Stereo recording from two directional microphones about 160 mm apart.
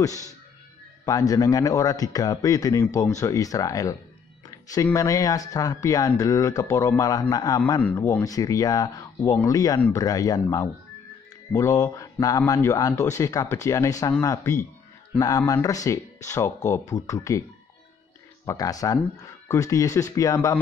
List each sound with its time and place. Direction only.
0.0 s speech: 20° left (ahead or behind)
4.5 s music: 20° left (ahead or behind)
4.8 s speech: 20° left (ahead or behind)
7.8 s speech: 10° left (ahead or behind)
18.4 s speech: 20° left (ahead or behind)